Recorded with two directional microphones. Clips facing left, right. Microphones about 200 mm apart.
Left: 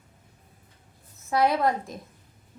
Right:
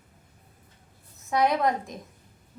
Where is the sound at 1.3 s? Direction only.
Centre (ahead or behind).